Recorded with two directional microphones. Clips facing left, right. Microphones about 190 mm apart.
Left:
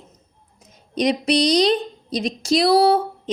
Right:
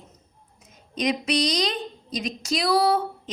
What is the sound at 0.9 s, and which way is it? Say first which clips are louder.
A woman's voice: left 5 dB; 35° left (ahead or behind).